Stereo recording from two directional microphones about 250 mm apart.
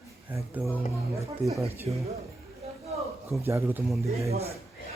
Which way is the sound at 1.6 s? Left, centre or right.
Right.